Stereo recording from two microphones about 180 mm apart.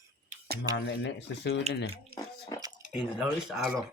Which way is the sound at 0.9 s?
75° left (ahead or behind).